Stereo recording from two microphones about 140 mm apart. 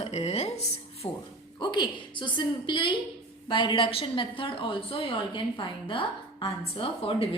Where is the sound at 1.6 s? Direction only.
35° left (ahead or behind).